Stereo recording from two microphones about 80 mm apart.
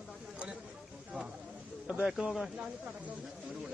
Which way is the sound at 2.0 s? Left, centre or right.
Centre.